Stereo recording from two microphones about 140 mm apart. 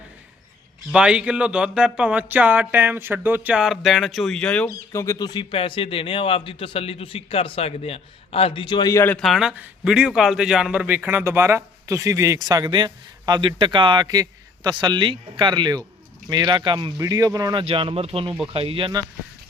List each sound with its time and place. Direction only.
0.9 s speech: 5° right (ahead or behind)
4.7 s speech: 20° left (ahead or behind)
8.9 s speech: 20° left (ahead or behind)
9.1 s a man's voice: centre (ahead or behind); by 19.0 s 35° right (ahead or behind)